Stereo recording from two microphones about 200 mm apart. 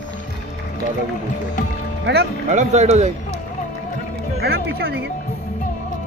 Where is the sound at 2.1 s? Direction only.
60° right (ahead or behind).